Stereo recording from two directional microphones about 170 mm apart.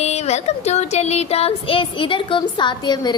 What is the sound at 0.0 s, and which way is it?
Music, 40° left (ahead or behind).